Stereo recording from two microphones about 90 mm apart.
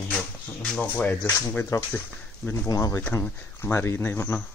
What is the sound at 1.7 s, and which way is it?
Speech, 40° left (ahead or behind).